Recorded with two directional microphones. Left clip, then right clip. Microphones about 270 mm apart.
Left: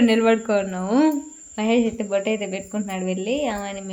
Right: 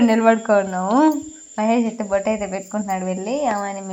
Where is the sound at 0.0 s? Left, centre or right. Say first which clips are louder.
Right 2 dB; centre.